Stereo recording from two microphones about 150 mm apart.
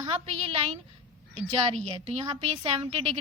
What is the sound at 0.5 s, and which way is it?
Speech, 40° right (ahead or behind).